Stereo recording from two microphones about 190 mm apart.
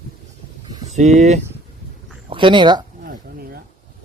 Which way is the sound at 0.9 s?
35° right (ahead or behind).